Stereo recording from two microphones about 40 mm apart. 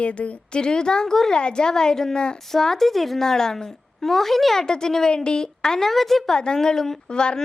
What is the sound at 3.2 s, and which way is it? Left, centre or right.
Speech, centre.